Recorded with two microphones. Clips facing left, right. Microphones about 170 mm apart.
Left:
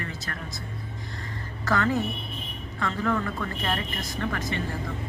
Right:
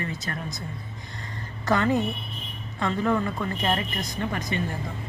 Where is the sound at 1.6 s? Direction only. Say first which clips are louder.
Right 2 dB; 20° right (ahead or behind).